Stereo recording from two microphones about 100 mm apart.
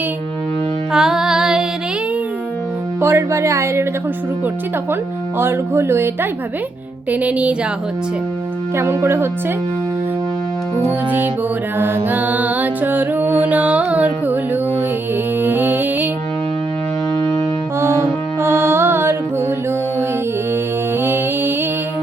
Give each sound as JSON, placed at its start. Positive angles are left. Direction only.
{"t": 0.9, "sound": "music", "side_deg": -5}
{"t": 3.0, "sound": "speech", "side_deg": -25}
{"t": 5.4, "sound": "speech", "side_deg": -25}
{"t": 7.1, "sound": "music", "side_deg": -15}
{"t": 8.7, "sound": "speech", "side_deg": -30}
{"t": 11.8, "sound": "music", "side_deg": -20}
{"t": 17.7, "sound": "music", "side_deg": -25}
{"t": 21.0, "sound": "music", "side_deg": -20}